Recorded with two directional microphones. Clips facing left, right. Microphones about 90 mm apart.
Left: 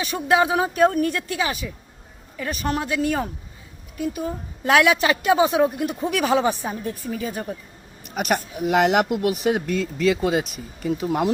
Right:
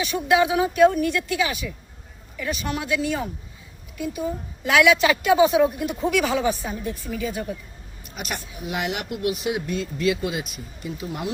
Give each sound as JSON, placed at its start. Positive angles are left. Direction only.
{"t": 0.0, "sound": "a woman's voice", "side_deg": 30}
{"t": 4.6, "sound": "speech", "side_deg": 35}
{"t": 6.2, "sound": "speech", "side_deg": 50}
{"t": 6.5, "sound": "a woman's voice", "side_deg": 25}
{"t": 6.8, "sound": "speech", "side_deg": 35}
{"t": 8.1, "sound": "speech", "side_deg": 60}
{"t": 9.1, "sound": "speech", "side_deg": 50}
{"t": 9.6, "sound": "speech", "side_deg": 90}
{"t": 11.0, "sound": "speech", "side_deg": 45}